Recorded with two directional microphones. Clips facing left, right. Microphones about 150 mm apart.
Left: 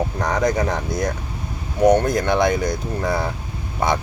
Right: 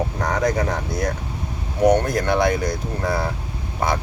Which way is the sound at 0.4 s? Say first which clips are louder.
Left 1 dB; 5° right (ahead or behind).